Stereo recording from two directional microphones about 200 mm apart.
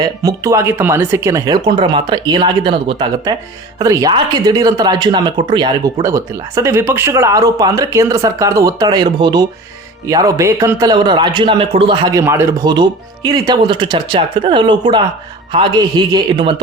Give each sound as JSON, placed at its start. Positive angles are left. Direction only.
{"t": 0.0, "sound": "a man's voice", "side_deg": -15}